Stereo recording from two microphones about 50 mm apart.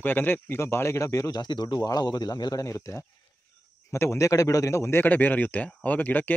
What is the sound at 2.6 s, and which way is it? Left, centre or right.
Speech, left.